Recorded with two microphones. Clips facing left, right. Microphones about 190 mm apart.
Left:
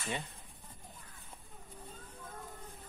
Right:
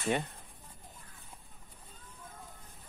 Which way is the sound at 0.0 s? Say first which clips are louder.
Right 8 dB; 60° right (ahead or behind).